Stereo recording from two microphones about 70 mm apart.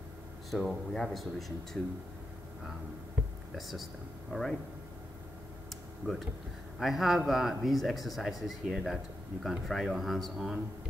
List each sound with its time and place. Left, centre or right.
0.5 s speech: centre
3.5 s speech: centre
6.0 s speech: right
6.8 s speech: centre